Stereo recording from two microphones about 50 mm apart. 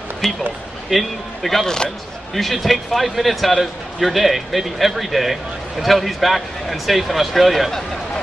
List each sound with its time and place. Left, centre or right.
0.2 s speech: centre